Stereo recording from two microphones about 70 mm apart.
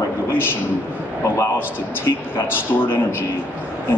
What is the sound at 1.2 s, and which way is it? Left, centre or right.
Speech, left.